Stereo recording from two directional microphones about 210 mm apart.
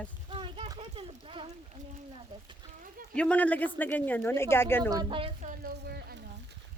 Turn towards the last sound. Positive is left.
turn(degrees=-50)  # may be behind; listen again after turning